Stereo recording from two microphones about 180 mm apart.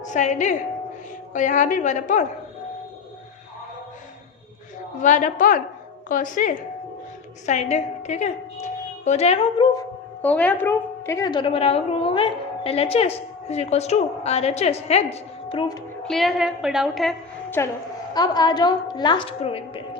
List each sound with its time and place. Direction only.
0.0 s a woman's voice: 40° left (ahead or behind)
4.9 s a woman's voice: 45° left (ahead or behind)
10.2 s a woman's voice: 10° left (ahead or behind); by 15.8 s 25° left (ahead or behind)
16.0 s a woman's voice: centre (ahead or behind)
17.6 s a woman's voice: 15° left (ahead or behind); by 20.0 s 30° left (ahead or behind)